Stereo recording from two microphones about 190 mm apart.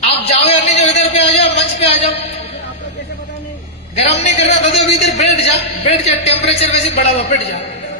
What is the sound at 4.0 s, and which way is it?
A man's voice, 35° left (ahead or behind).